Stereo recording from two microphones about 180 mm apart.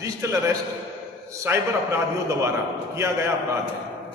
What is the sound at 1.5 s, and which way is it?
Speech, 10° right (ahead or behind).